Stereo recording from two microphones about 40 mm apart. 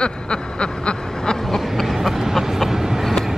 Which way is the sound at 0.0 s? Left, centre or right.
Left.